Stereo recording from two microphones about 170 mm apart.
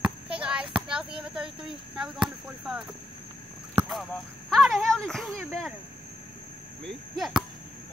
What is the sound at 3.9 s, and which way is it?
Speech, centre (ahead or behind).